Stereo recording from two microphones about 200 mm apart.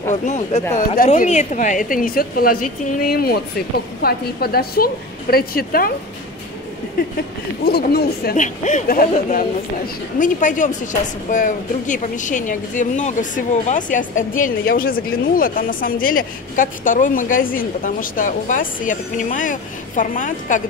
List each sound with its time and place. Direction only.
0.1 s a woman's voice: 35° left (ahead or behind)
7.6 s a woman's voice: 50° left (ahead or behind)